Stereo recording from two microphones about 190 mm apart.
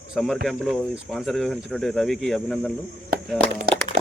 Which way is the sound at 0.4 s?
Centre (ahead or behind).